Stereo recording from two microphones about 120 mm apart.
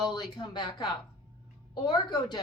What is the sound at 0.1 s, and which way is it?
A woman's voice, 35° left (ahead or behind).